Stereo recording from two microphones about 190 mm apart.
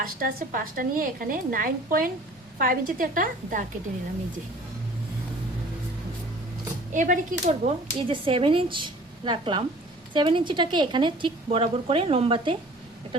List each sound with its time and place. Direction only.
0.0 s speech: 50° right (ahead or behind)
6.9 s speech: 45° right (ahead or behind)